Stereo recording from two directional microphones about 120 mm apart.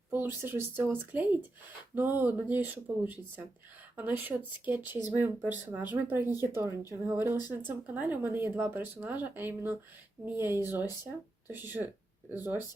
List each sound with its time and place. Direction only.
0.1 s speech: 15° right (ahead or behind)